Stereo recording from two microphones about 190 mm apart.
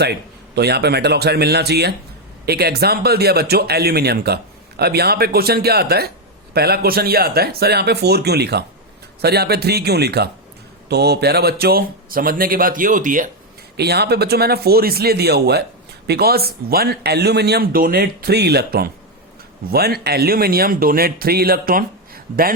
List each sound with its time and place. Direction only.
0.0 s speech: 60° right (ahead or behind); by 13.3 s 45° right (ahead or behind)
13.7 s speech: 60° right (ahead or behind)